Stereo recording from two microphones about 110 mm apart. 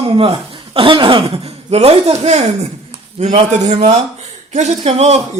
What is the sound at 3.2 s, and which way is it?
Speech, 90° right.